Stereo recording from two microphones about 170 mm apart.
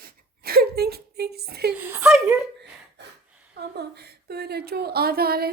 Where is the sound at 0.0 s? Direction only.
65° right (ahead or behind).